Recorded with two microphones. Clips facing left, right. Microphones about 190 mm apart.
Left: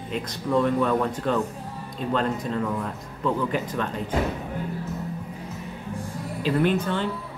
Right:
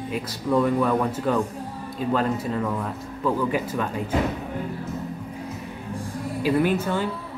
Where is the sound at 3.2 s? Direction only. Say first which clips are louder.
Right 1 dB; 10° right (ahead or behind).